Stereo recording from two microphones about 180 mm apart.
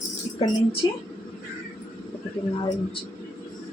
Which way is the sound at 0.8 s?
30° left (ahead or behind).